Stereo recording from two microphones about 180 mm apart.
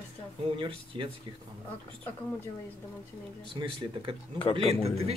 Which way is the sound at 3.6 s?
30° right (ahead or behind).